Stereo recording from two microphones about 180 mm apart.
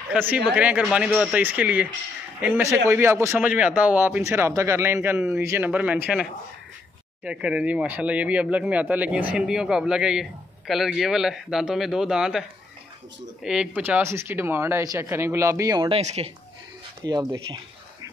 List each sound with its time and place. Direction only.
0.1 s speech: 10° right (ahead or behind)
7.2 s speech: 5° right (ahead or behind)
15.9 s speech: 35° right (ahead or behind)
17.0 s speech: 25° right (ahead or behind)